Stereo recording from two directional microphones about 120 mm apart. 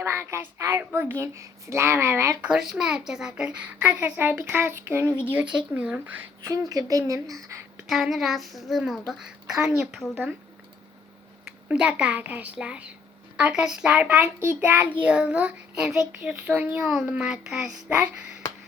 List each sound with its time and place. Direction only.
0.0 s a woman's voice: 20° right (ahead or behind)
2.4 s a child's voice: 5° right (ahead or behind)
5.3 s a child's voice: 10° right (ahead or behind)
6.4 s a woman's voice: 30° right (ahead or behind)
7.9 s a child's voice: centre (ahead or behind)
11.7 s a child's voice: 10° right (ahead or behind)
14.3 s a woman's voice: 20° right (ahead or behind)
17.2 s a child's voice: 5° right (ahead or behind)